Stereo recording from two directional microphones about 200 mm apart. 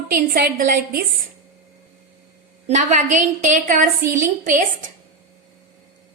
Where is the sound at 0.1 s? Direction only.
45° right (ahead or behind).